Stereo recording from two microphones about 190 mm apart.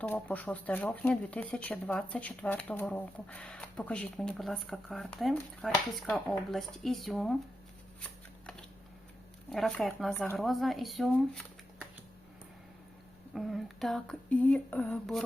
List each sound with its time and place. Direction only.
0.0 s speech: 5° left (ahead or behind)
9.5 s speech: 5° left (ahead or behind)
13.3 s speech: centre (ahead or behind)